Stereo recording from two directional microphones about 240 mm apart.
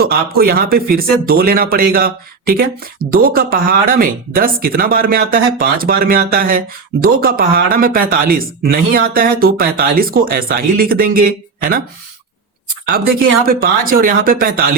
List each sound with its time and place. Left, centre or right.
0.0 s speech: right
12.9 s speech: right